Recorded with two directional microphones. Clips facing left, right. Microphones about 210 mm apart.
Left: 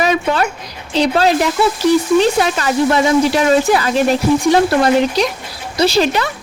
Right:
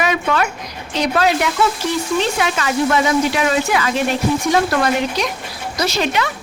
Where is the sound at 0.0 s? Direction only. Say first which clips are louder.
Left 3 dB; 35° left (ahead or behind).